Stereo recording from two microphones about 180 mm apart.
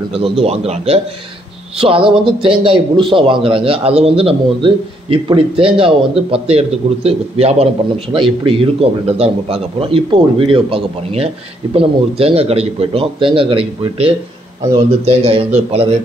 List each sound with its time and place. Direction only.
0.1 s a man's voice: 30° right (ahead or behind)